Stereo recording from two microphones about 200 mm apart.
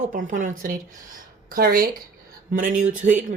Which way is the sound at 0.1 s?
40° right (ahead or behind).